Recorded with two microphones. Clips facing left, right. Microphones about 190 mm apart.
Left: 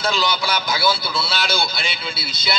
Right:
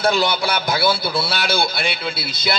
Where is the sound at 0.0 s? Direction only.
55° right (ahead or behind).